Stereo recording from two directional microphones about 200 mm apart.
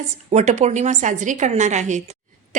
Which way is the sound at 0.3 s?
35° right (ahead or behind).